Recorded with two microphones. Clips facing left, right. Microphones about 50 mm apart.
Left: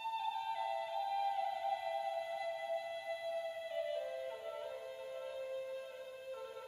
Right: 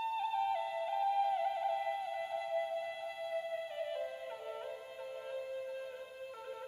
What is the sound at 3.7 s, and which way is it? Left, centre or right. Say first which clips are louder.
Flute: even; right.